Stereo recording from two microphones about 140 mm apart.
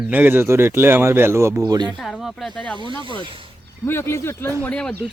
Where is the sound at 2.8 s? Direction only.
35° right (ahead or behind).